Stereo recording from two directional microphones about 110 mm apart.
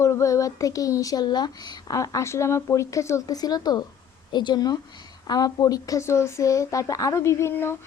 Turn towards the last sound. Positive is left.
turn(degrees=20)  # may be behind; listen again after turning